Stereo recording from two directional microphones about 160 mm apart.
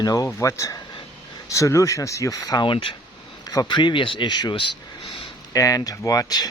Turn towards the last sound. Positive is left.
turn(degrees=25)  # may be behind; listen again after turning